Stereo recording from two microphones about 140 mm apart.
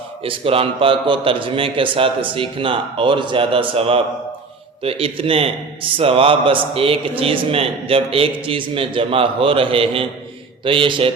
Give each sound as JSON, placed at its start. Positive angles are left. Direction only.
{"t": 0.3, "sound": "a man's voice", "side_deg": -40}